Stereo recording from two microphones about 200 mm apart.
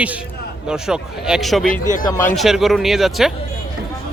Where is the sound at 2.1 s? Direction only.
10° left (ahead or behind).